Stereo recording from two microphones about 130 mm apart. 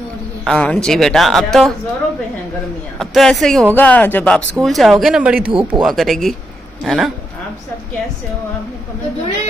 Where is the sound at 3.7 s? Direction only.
15° left (ahead or behind).